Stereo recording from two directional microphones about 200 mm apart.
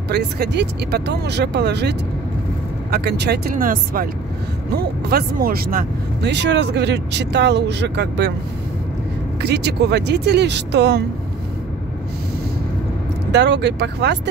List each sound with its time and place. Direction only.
0.1 s speech: 55° right (ahead or behind)
9.4 s speech: 55° right (ahead or behind)
13.3 s speech: 60° right (ahead or behind)